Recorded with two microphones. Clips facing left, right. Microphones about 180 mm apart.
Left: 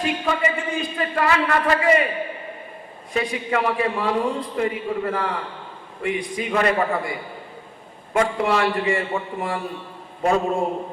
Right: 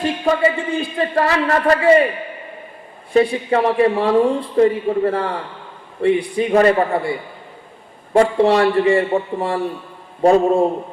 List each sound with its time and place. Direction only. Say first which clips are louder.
0.0 s speech: right 6 dB; 35° right (ahead or behind)
3.1 s speech: right 8 dB; 30° right (ahead or behind)
8.1 s speech: right 7 dB; 30° right (ahead or behind)